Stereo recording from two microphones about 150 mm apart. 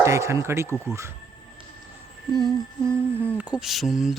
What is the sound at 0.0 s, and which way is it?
Speech, 20° right (ahead or behind).